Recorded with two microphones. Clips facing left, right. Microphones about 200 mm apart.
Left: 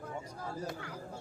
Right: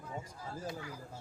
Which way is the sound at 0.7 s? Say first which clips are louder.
Even; 60° left (ahead or behind).